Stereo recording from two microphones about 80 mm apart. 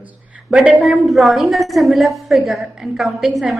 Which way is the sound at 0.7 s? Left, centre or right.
Centre.